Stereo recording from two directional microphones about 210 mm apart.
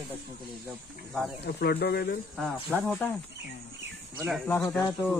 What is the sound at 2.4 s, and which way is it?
Speech, 5° left (ahead or behind).